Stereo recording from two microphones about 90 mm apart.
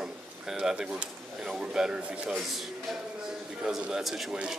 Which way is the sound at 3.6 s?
5° right (ahead or behind).